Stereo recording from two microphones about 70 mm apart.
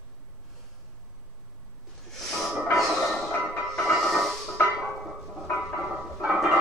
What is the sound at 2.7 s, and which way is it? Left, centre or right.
Music, centre.